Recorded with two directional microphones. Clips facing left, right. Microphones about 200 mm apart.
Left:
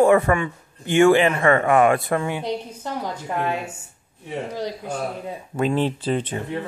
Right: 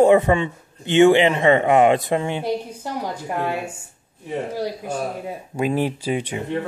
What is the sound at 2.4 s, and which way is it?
Speech, 10° right (ahead or behind).